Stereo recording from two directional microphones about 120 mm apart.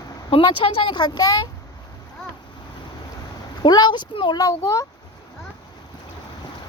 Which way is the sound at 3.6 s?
35° left (ahead or behind).